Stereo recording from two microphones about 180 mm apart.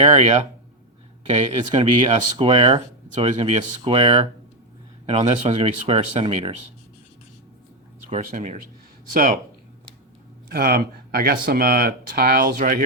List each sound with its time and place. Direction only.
0.0 s speech: 35° right (ahead or behind)
1.7 s speech: 30° right (ahead or behind)
8.1 s speech: 45° right (ahead or behind)
10.5 s speech: 55° right (ahead or behind)